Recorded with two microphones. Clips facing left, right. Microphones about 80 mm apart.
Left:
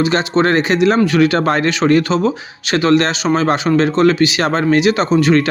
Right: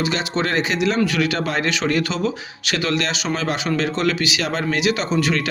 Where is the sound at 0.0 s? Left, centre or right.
Left.